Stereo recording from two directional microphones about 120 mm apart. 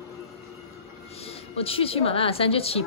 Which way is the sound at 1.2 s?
55° left (ahead or behind).